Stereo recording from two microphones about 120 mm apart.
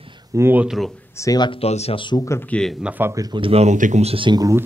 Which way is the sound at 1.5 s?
60° left (ahead or behind).